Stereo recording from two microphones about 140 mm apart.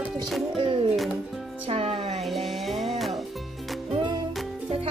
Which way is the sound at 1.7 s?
45° right (ahead or behind).